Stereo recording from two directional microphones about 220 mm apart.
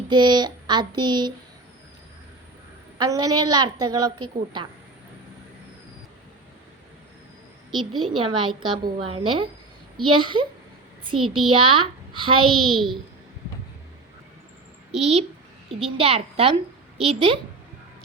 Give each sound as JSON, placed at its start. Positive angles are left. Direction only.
{"t": 0.1, "sound": "a woman's voice", "side_deg": -20}
{"t": 3.0, "sound": "a woman's voice", "side_deg": -15}
{"t": 7.9, "sound": "a woman's voice", "side_deg": -20}
{"t": 11.5, "sound": "a child's voice", "side_deg": -25}
{"t": 12.6, "sound": "a child's voice", "side_deg": 0}
{"t": 14.9, "sound": "a woman's voice", "side_deg": -30}